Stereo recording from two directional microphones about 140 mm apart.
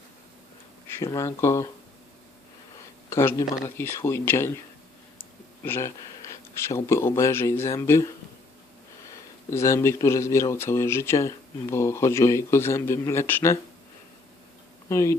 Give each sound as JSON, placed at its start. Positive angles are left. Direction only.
{"t": 0.9, "sound": "speech", "side_deg": 25}
{"t": 3.1, "sound": "speech", "side_deg": 20}
{"t": 5.6, "sound": "speech", "side_deg": 15}
{"t": 9.5, "sound": "speech", "side_deg": 20}
{"t": 14.8, "sound": "speech", "side_deg": 20}